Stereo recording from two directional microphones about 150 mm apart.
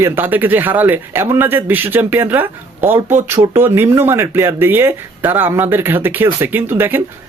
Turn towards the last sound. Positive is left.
turn(degrees=-15)  # may be behind; listen again after turning